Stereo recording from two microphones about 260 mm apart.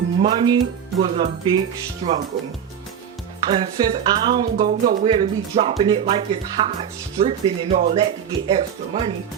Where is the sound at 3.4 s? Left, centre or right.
Centre.